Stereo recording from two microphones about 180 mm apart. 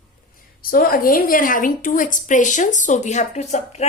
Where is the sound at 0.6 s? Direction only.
55° left (ahead or behind).